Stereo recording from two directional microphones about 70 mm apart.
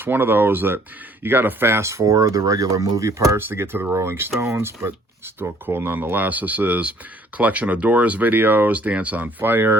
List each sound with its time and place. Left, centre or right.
0.0 s speech: right
3.5 s speech: right